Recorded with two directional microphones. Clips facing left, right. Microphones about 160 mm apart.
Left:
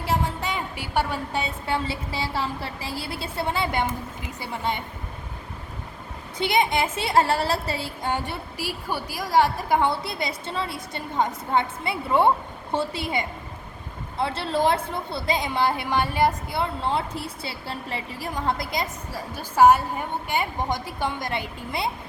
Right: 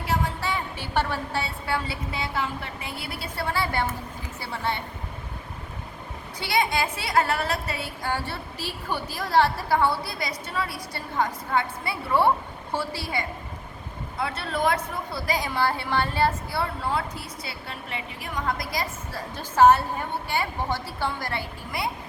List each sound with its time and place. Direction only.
0.0 s a woman's voice: 25° left (ahead or behind)
6.4 s a woman's voice: 20° left (ahead or behind)
19.1 s a woman's voice: 10° left (ahead or behind)